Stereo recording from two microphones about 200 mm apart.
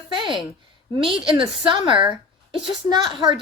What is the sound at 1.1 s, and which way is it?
Speech, 25° right (ahead or behind).